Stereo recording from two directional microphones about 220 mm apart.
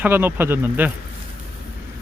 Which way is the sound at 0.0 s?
10° right (ahead or behind).